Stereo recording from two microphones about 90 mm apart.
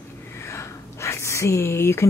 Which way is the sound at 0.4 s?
30° left (ahead or behind).